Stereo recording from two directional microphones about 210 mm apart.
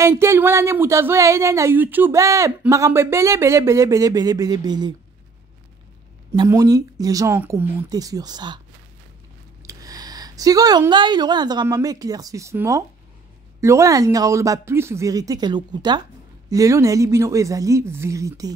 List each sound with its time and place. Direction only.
0.0 s speech: 10° right (ahead or behind)
6.3 s speech: 15° right (ahead or behind)
9.6 s speech: 15° right (ahead or behind)